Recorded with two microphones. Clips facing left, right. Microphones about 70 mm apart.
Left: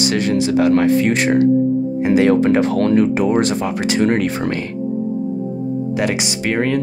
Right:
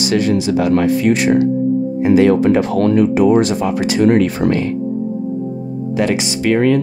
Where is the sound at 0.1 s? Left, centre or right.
Left.